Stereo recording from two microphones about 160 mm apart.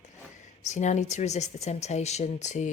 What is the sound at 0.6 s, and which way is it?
Speech, 50° left (ahead or behind).